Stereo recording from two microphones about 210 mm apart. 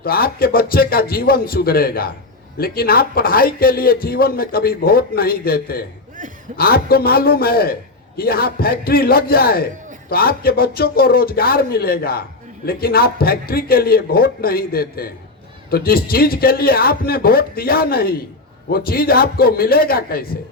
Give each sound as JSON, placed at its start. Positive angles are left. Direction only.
{"t": 0.0, "sound": "a man's voice", "side_deg": 45}